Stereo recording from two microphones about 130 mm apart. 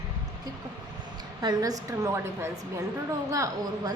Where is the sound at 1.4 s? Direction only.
30° right (ahead or behind).